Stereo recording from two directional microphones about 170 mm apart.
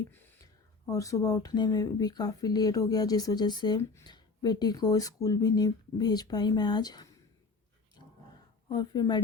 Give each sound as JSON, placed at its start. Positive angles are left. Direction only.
{"t": 0.9, "sound": "speech", "side_deg": 20}
{"t": 8.7, "sound": "speech", "side_deg": 25}